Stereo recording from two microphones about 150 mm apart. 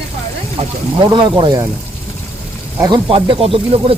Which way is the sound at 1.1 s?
30° right (ahead or behind).